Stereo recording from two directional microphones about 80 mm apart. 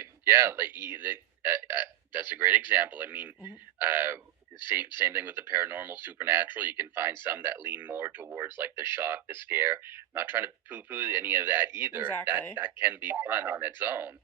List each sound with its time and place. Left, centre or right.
0.0 s speech: right